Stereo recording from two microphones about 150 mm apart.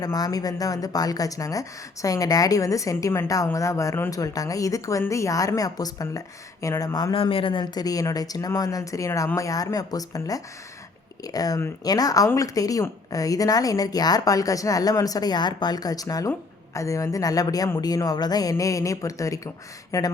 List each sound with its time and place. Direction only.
0.0 s a woman's voice: 25° left (ahead or behind)